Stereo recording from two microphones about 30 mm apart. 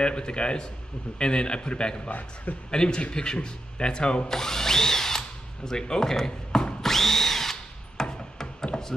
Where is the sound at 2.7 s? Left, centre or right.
Left.